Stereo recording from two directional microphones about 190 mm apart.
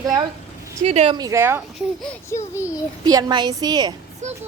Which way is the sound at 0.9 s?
35° right (ahead or behind).